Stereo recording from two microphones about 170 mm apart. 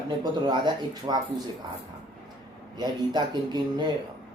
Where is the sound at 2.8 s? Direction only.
25° right (ahead or behind).